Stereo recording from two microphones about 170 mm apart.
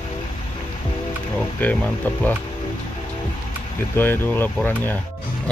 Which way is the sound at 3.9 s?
10° left (ahead or behind).